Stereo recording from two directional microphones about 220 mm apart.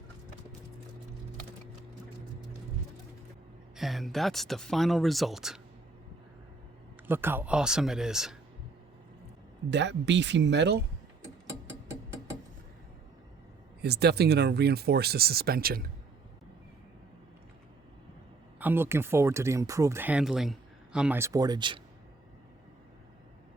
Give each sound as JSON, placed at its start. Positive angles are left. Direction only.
{"t": 3.8, "sound": "speech", "side_deg": 0}
{"t": 7.1, "sound": "speech", "side_deg": -10}
{"t": 9.6, "sound": "speech", "side_deg": -55}
{"t": 11.9, "sound": "a sound", "side_deg": -15}
{"t": 13.8, "sound": "speech", "side_deg": -50}
{"t": 18.6, "sound": "speech", "side_deg": -10}